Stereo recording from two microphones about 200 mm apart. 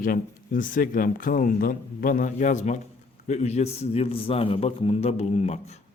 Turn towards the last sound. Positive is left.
turn(degrees=30)  # may be behind; listen again after turning